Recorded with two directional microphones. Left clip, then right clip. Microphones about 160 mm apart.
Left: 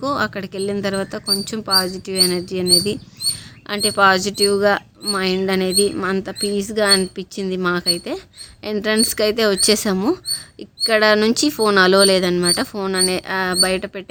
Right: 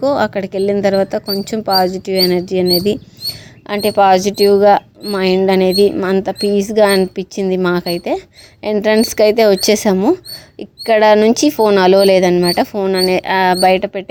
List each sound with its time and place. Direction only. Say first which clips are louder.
0.0 s speech: right 7 dB; 20° right (ahead or behind)